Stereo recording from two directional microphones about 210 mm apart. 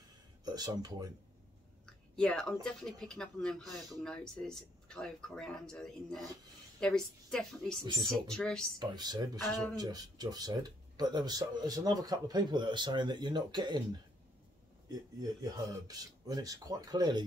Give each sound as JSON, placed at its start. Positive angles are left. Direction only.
{"t": 0.5, "sound": "speech", "side_deg": -20}
{"t": 2.1, "sound": "speech", "side_deg": 5}
{"t": 7.8, "sound": "speech", "side_deg": -20}
{"t": 8.1, "sound": "speech", "side_deg": 5}
{"t": 8.7, "sound": "speech", "side_deg": -20}
{"t": 15.4, "sound": "speech", "side_deg": -20}